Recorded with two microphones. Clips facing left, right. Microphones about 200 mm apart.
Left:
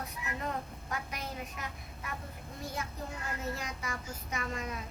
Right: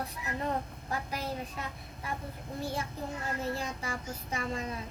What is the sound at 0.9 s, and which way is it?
A child's voice, 30° right (ahead or behind).